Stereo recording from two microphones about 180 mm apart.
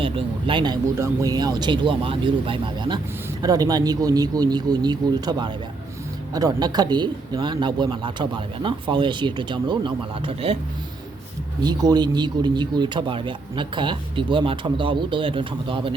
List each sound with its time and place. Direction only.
0.0 s speech: 30° right (ahead or behind)
11.6 s speech: 20° right (ahead or behind)